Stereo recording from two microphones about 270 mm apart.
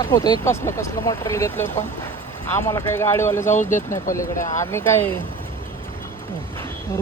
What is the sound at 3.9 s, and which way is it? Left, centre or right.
Speech, centre.